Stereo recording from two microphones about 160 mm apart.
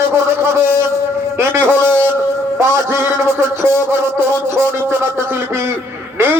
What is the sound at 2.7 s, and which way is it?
A man's voice, 15° right (ahead or behind).